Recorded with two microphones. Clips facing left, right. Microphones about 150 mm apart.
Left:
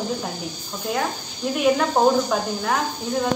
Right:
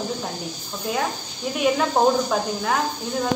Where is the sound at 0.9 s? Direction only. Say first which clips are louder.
Left 1 dB; centre (ahead or behind).